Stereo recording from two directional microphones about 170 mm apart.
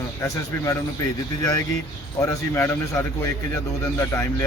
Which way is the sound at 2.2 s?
15° left (ahead or behind).